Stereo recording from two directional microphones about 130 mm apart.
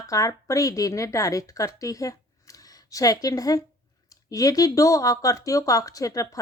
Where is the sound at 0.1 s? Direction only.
25° left (ahead or behind).